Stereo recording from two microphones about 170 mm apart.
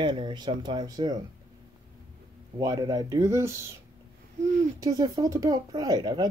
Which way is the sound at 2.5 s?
20° right (ahead or behind).